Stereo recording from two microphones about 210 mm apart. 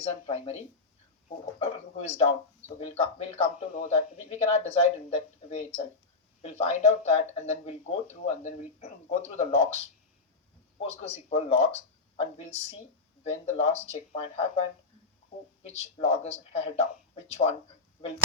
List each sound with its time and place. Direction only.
0.0 s speech: 30° left (ahead or behind)
1.5 s speech: 30° left (ahead or behind)
10.8 s speech: 30° left (ahead or behind)
15.6 s speech: 30° left (ahead or behind)